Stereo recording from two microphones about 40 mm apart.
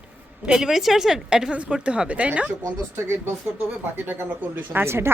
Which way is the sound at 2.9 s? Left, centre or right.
Right.